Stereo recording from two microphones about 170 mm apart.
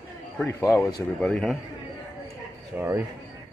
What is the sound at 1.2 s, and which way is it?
Speech, 5° left (ahead or behind).